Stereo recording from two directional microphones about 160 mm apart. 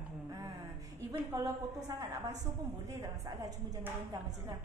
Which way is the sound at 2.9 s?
20° right (ahead or behind).